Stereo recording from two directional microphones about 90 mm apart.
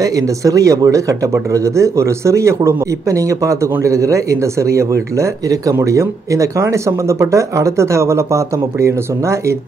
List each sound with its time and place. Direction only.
0.0 s speech: 40° right (ahead or behind)